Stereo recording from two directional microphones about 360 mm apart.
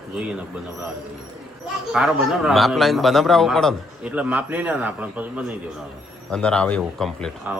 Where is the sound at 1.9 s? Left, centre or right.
Centre.